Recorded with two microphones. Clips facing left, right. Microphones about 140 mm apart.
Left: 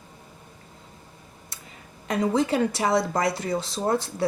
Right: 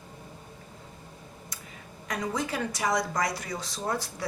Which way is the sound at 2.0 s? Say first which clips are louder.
Left 8 dB; 30° left (ahead or behind).